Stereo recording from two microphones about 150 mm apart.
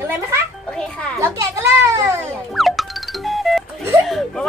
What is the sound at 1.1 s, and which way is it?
Speech, 20° right (ahead or behind).